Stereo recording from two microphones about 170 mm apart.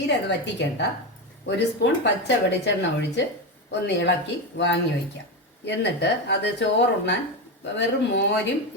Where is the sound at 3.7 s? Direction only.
90° left.